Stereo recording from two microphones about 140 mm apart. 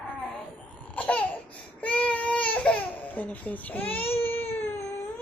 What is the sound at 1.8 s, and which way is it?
Baby cry, 10° left (ahead or behind).